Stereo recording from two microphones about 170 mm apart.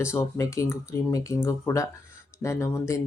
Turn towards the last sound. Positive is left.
turn(degrees=20)  # may be behind; listen again after turning